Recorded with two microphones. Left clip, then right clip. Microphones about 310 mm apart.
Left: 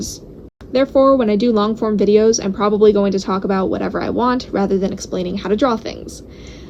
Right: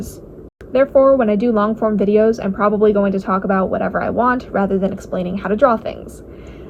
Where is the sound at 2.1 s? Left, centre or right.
Centre.